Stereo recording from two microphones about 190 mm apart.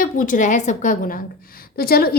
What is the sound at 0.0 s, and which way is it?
A woman's voice, 45° left (ahead or behind).